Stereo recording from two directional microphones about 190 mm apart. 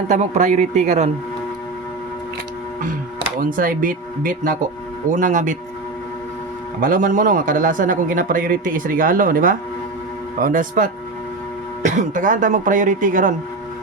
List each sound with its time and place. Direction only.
0.1 s a man's voice: 40° right (ahead or behind)
3.5 s a man's voice: 45° right (ahead or behind)
6.7 s a man's voice: 45° right (ahead or behind)